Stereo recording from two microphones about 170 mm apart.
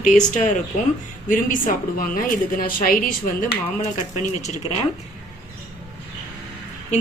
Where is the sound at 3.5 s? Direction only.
40° left (ahead or behind).